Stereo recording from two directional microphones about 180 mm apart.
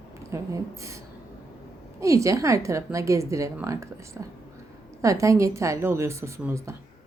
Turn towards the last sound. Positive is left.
turn(degrees=-15)  # may be behind; listen again after turning